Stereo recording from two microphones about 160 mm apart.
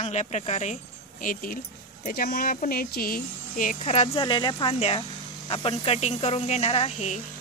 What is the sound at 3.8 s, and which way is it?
Speech, 40° left (ahead or behind).